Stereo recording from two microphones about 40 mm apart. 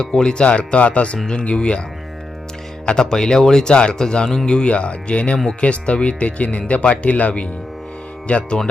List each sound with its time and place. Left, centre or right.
0.0 s speech: centre
0.4 s speech: left
2.8 s speech: left